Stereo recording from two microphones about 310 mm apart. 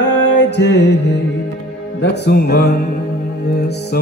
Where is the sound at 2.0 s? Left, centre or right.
Left.